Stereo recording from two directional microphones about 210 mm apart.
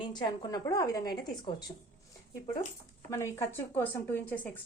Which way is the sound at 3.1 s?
15° left (ahead or behind).